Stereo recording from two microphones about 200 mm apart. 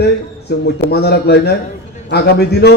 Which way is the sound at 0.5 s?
55° left (ahead or behind).